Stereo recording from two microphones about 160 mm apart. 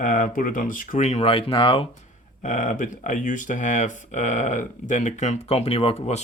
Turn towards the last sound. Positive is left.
turn(degrees=40)  # may be behind; listen again after turning